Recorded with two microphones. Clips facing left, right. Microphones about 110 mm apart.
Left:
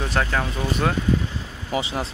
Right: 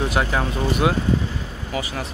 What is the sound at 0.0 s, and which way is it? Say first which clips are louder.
Speech: right 2 dB; 10° right (ahead or behind).